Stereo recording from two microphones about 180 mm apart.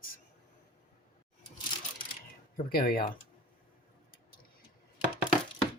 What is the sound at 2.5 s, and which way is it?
Speech, 55° left (ahead or behind).